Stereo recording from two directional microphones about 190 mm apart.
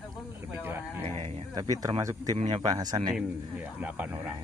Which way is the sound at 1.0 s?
35° right (ahead or behind).